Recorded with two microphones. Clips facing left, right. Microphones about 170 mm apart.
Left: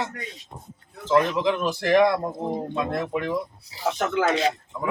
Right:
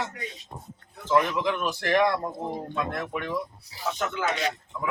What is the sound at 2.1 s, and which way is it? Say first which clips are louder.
Speech: left 3 dB; 20° left (ahead or behind).